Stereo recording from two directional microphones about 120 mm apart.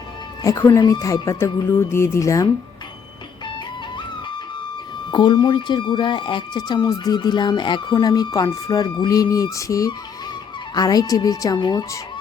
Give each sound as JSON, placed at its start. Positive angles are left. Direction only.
{"t": 0.4, "sound": "speech", "side_deg": 30}
{"t": 5.1, "sound": "speech", "side_deg": 40}